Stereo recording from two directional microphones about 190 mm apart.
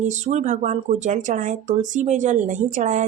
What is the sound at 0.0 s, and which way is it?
Speech, 40° right (ahead or behind).